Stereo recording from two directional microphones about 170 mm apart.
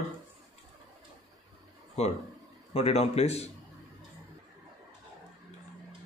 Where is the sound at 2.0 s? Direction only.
40° left (ahead or behind).